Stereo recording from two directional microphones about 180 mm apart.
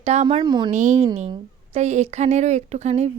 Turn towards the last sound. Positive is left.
turn(degrees=-40)  # may be behind; listen again after turning